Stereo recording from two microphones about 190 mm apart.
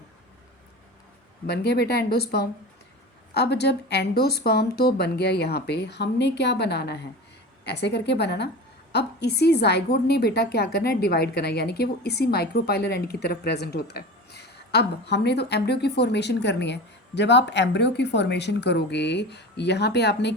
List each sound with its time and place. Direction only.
1.5 s a woman's voice: 60° left (ahead or behind)